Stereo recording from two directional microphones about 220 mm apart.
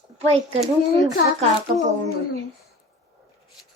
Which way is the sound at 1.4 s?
30° right (ahead or behind).